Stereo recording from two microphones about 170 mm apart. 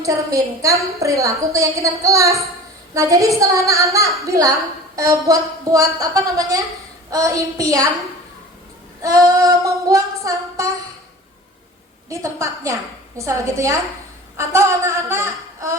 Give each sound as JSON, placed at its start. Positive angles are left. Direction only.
{"t": 0.0, "sound": "a woman's voice", "side_deg": -20}
{"t": 4.2, "sound": "female singing", "side_deg": -20}
{"t": 9.0, "sound": "female singing", "side_deg": -20}
{"t": 12.0, "sound": "a woman's voice", "side_deg": -20}